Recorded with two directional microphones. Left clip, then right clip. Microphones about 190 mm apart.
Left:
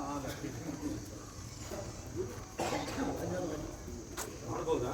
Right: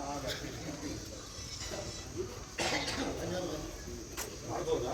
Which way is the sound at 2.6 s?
50° left (ahead or behind).